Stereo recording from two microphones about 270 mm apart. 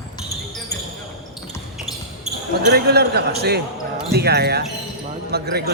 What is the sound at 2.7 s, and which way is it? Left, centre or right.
A man's voice, right.